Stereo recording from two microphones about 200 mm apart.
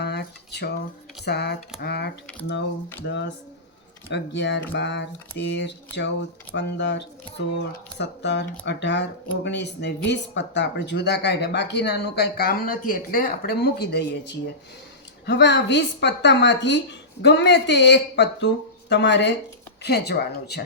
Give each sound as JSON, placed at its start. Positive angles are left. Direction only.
{"t": 0.0, "sound": "a sound", "side_deg": 55}
{"t": 1.2, "sound": "speech", "side_deg": 55}
{"t": 3.0, "sound": "speech", "side_deg": 70}